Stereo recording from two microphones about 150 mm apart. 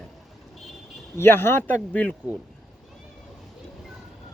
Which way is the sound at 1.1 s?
15° left (ahead or behind).